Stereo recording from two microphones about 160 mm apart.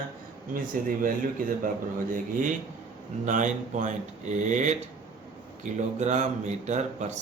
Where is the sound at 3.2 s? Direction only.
50° right (ahead or behind).